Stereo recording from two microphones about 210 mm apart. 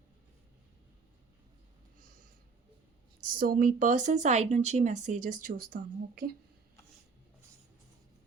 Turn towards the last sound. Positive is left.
turn(degrees=-40)  # may be behind; listen again after turning